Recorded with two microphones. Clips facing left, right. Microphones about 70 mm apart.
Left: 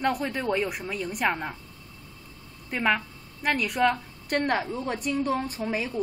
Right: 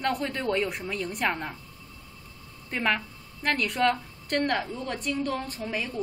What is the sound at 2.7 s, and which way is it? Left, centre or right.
A woman's voice, centre.